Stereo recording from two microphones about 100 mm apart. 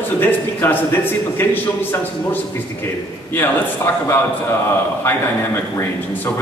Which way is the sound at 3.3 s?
20° left (ahead or behind).